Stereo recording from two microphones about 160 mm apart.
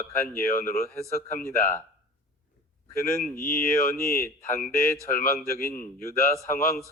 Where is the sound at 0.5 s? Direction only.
65° left (ahead or behind).